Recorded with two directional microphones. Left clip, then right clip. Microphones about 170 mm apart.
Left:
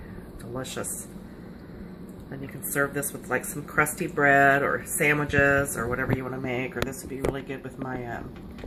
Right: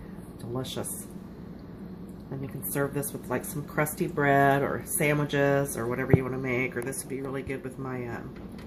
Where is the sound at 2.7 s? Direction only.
25° right (ahead or behind).